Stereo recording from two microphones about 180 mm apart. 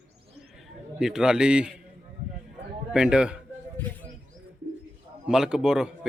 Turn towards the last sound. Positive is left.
turn(degrees=-5)  # may be behind; listen again after turning